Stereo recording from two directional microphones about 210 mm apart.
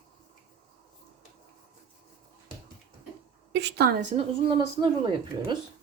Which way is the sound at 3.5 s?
55° right (ahead or behind).